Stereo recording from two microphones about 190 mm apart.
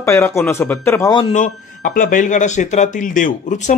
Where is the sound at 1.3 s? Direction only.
45° left (ahead or behind).